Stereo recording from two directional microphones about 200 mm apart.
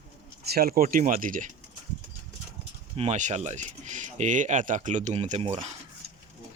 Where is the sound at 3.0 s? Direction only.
35° right (ahead or behind).